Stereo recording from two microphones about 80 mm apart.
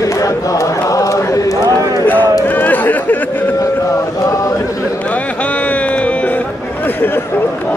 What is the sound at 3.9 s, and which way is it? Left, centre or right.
Mantra, left.